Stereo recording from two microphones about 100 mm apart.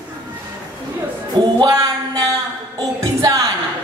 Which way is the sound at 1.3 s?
40° right (ahead or behind).